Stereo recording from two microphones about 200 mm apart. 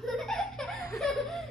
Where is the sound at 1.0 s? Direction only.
Centre (ahead or behind).